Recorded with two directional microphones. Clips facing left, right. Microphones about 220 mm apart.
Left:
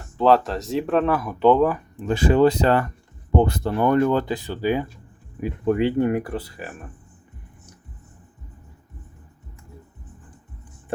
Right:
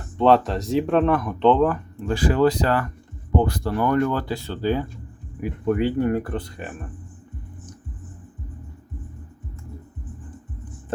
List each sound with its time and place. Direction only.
0.2 s speech: centre (ahead or behind)
5.4 s speech: 25° left (ahead or behind); by 6.8 s 5° left (ahead or behind)